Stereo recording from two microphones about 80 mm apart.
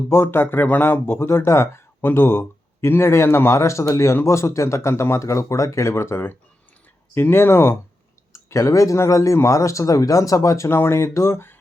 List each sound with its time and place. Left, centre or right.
0.1 s speech: left